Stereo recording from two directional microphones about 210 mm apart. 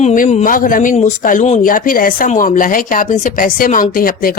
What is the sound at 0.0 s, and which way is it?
A woman's voice, 35° left (ahead or behind).